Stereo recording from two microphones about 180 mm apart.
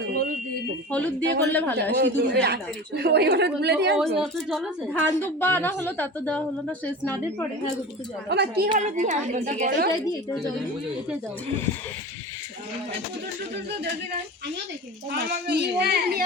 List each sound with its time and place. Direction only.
0.1 s smoke detector: 50° right (ahead or behind)
1.2 s a man's voice: 80° right
4.2 s a woman's voice: centre (ahead or behind)
4.9 s a woman's voice: 10° left (ahead or behind)
8.3 s a woman's voice: 65° right (ahead or behind)
8.8 s a woman's voice: 40° right (ahead or behind)
15.1 s speech: 70° right (ahead or behind)